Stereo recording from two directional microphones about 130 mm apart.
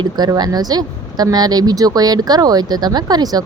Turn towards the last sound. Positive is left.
turn(degrees=-30)  # may be behind; listen again after turning